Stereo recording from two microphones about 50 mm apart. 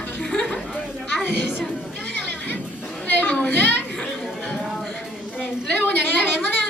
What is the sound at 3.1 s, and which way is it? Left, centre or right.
Children playing, left.